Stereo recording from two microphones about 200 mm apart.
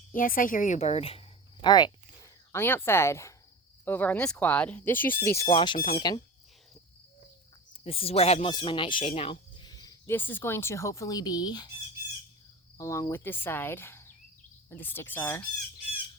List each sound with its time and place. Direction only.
0.1 s speech: 45° left (ahead or behind); by 5.5 s 10° left (ahead or behind)
5.5 s speech: 25° left (ahead or behind)
7.9 s speech: 30° left (ahead or behind)
12.7 s speech: 15° left (ahead or behind)